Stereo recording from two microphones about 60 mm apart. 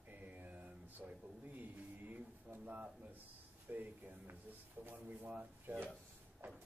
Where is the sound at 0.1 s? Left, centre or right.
Right.